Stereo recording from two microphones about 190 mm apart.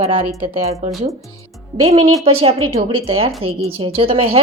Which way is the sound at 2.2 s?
30° right (ahead or behind).